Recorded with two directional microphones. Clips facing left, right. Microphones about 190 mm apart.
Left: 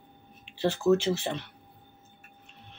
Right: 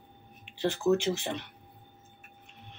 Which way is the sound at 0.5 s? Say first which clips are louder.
Left 2 dB; 15° right (ahead or behind).